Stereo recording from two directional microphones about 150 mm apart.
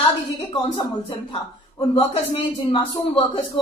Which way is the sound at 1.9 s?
40° left (ahead or behind).